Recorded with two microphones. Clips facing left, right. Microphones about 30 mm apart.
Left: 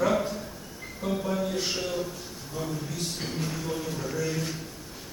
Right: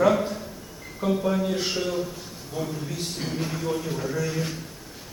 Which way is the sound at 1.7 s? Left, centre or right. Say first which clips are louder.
Right 3 dB; centre.